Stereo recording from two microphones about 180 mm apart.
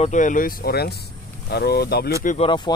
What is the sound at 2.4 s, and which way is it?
Speech, 25° left (ahead or behind).